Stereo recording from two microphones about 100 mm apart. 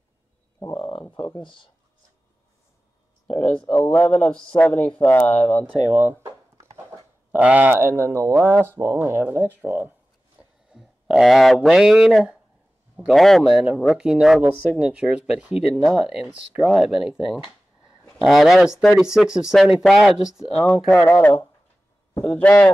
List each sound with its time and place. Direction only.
0.7 s a sound: 60° left (ahead or behind)
1.4 s speech: 55° left (ahead or behind)
3.3 s speech: 90° left
3.7 s speech: 20° left (ahead or behind)
5.3 s speech: 90° left
5.9 s speech: 20° right (ahead or behind)
7.3 s speech: 15° right (ahead or behind)
10.4 s a sound: 10° right (ahead or behind)
10.7 s speech: 5° right (ahead or behind)
18.2 s speech: centre (ahead or behind)
20.6 s speech: 15° left (ahead or behind)